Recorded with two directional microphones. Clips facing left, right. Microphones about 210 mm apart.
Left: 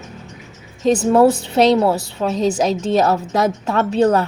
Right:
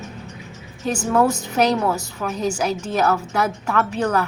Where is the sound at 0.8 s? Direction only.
35° left (ahead or behind).